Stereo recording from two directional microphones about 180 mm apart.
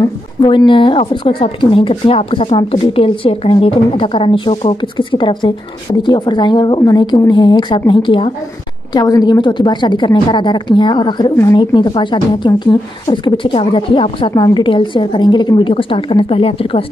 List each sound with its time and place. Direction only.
0.0 s a woman's voice: 25° left (ahead or behind)